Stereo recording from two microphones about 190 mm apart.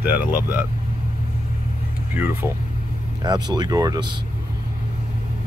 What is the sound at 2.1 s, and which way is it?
Speech, 10° right (ahead or behind).